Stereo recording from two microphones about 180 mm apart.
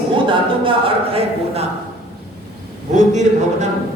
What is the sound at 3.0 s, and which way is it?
Speech, 40° right (ahead or behind).